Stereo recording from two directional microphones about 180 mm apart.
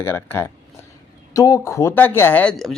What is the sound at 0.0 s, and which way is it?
Speech, 15° left (ahead or behind).